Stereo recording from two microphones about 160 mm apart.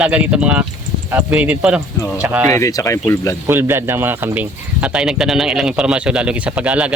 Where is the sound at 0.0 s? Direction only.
10° right (ahead or behind).